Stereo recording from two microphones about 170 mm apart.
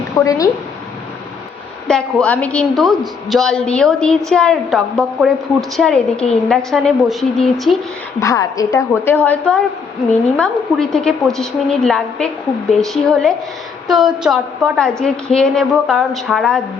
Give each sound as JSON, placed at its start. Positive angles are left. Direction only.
{"t": 0.3, "sound": "a woman's voice", "side_deg": 20}
{"t": 1.9, "sound": "a woman's voice", "side_deg": 5}
{"t": 8.2, "sound": "a woman's voice", "side_deg": 20}
{"t": 9.1, "sound": "a woman's voice", "side_deg": 10}